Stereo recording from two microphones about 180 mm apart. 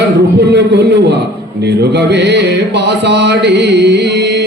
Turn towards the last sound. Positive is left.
turn(degrees=-70)  # may be behind; listen again after turning